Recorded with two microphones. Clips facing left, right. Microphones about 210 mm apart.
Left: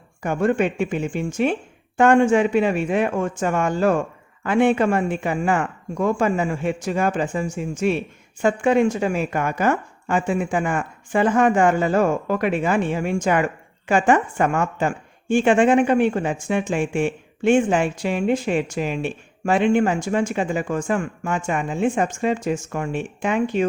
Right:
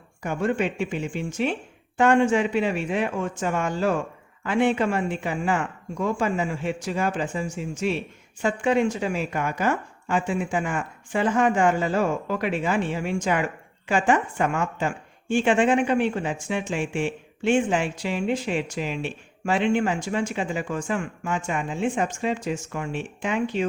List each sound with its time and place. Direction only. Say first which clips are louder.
0.2 s speech: left 5 dB; 50° left (ahead or behind)